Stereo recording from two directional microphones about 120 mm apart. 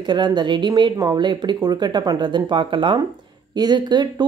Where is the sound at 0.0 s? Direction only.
40° right (ahead or behind).